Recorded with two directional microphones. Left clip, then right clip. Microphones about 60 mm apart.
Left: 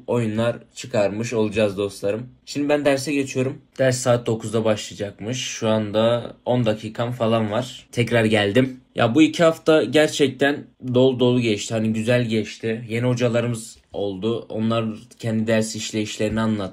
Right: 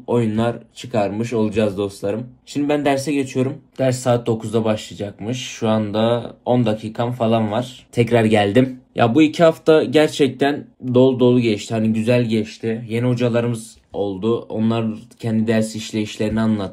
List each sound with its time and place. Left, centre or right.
0.1 s speech: right
0.9 s speech: centre
1.4 s speech: right
3.7 s speech: centre; by 7.3 s right
7.3 s speech: centre
7.9 s speech: right
11.1 s speech: centre
13.0 s speech: centre
13.9 s speech: right
15.2 s speech: right